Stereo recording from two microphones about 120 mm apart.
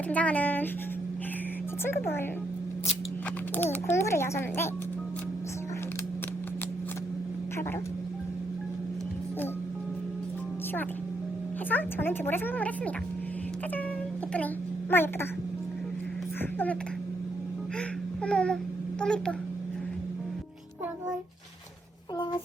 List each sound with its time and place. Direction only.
0.1 s speech: 10° left (ahead or behind)
1.8 s a child's voice: 20° left (ahead or behind)
3.5 s a child's voice: 15° left (ahead or behind)
11.7 s speech: 15° left (ahead or behind)
14.3 s a child's voice: 15° left (ahead or behind)
16.4 s speech: 15° left (ahead or behind)
18.2 s speech: 10° left (ahead or behind)